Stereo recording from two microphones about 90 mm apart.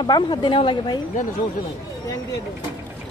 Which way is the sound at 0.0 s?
60° left (ahead or behind).